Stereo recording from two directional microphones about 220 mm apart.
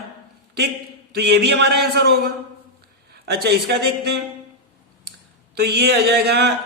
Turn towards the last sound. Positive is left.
turn(degrees=-45)  # may be behind; listen again after turning